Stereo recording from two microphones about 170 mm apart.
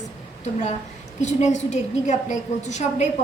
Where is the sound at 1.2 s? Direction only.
45° left (ahead or behind).